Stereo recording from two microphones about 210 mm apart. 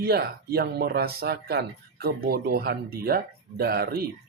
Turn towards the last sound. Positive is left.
turn(degrees=-45)  # may be behind; listen again after turning